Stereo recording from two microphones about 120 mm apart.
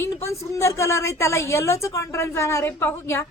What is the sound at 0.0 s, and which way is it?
A woman's voice, 25° left (ahead or behind).